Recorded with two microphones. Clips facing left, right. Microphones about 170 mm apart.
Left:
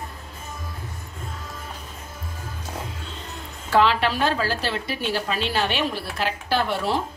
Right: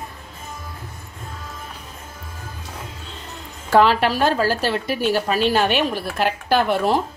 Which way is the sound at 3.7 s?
45° right (ahead or behind).